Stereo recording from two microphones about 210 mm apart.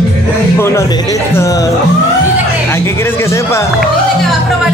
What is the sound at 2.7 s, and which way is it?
Speech, 10° left (ahead or behind).